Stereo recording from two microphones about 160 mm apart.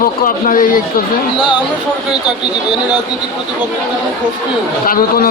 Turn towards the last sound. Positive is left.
turn(degrees=65)  # may be behind; listen again after turning